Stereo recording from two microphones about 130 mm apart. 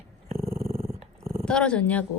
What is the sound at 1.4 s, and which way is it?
Speech, 5° left (ahead or behind).